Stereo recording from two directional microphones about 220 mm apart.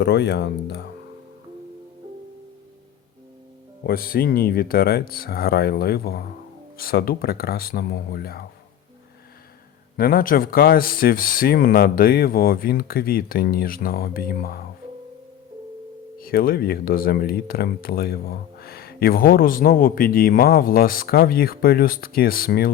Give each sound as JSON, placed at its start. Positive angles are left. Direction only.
{"t": 0.0, "sound": "speech", "side_deg": 50}
{"t": 3.8, "sound": "speech", "side_deg": 40}
{"t": 10.0, "sound": "speech", "side_deg": 40}
{"t": 16.1, "sound": "speech", "side_deg": 40}